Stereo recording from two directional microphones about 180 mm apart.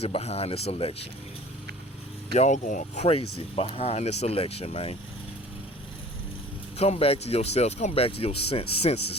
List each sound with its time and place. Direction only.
0.0 s speech: 35° left (ahead or behind)
2.3 s speech: 40° left (ahead or behind)
6.7 s speech: 35° left (ahead or behind)